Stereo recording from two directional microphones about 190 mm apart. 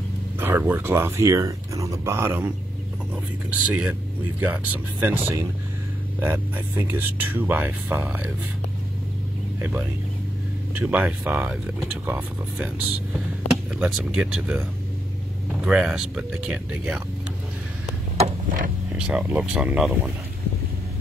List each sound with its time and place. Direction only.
0.4 s speech: 10° right (ahead or behind)
5.0 s speech: 10° right (ahead or behind)
9.6 s speech: 10° right (ahead or behind)
18.1 s a sound: 40° right (ahead or behind)
19.0 s speech: 5° right (ahead or behind)